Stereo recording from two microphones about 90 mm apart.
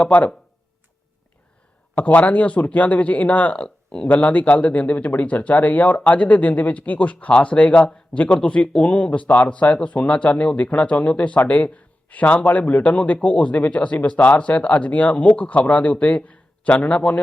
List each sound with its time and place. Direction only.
0.0 s speech: 15° left (ahead or behind)
2.0 s speech: 15° left (ahead or behind)